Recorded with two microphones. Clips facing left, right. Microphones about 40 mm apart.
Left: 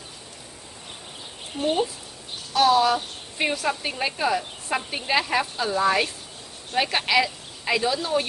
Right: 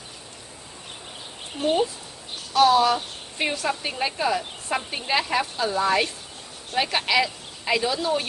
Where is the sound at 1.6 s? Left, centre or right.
Centre.